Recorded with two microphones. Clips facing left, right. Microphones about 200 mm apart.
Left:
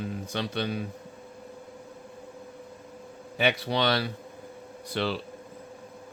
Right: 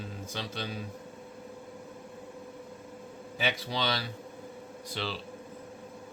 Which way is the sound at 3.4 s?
60° left (ahead or behind).